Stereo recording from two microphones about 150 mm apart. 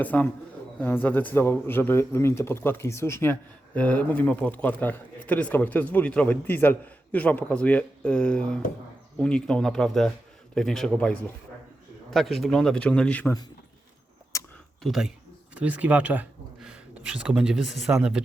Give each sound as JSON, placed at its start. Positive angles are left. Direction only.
{"t": 0.0, "sound": "speech", "side_deg": 10}
{"t": 14.3, "sound": "a sound", "side_deg": 20}
{"t": 14.8, "sound": "speech", "side_deg": -5}